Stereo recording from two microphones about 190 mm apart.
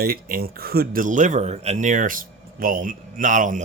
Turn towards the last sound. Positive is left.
turn(degrees=-40)  # may be behind; listen again after turning